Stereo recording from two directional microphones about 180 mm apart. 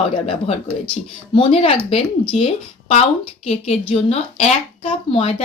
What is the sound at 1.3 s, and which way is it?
Speech, 30° left (ahead or behind).